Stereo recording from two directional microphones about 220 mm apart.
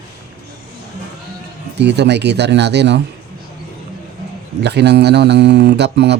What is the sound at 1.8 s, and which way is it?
Speech, 50° right (ahead or behind).